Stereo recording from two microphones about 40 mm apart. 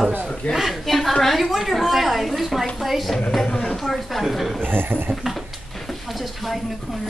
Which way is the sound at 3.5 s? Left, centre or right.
Left.